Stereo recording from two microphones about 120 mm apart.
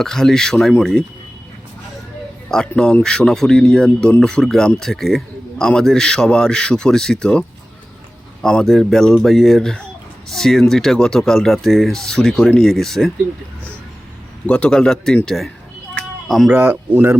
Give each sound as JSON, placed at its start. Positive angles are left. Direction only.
{"t": 0.0, "sound": "speech", "side_deg": 5}
{"t": 2.5, "sound": "speech", "side_deg": 5}
{"t": 14.4, "sound": "speech", "side_deg": 10}
{"t": 16.5, "sound": "speech", "side_deg": -15}